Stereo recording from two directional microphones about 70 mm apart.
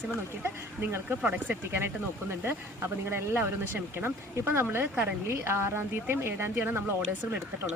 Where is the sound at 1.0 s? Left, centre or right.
Right.